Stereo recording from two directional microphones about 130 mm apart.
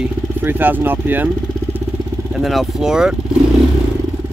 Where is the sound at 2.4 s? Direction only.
Centre (ahead or behind).